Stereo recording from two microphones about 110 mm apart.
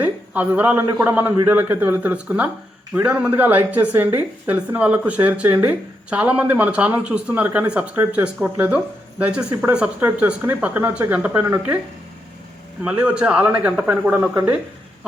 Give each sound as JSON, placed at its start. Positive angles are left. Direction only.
{"t": 0.0, "sound": "a sound", "side_deg": -15}
{"t": 1.0, "sound": "speech", "side_deg": -15}
{"t": 12.8, "sound": "speech", "side_deg": -10}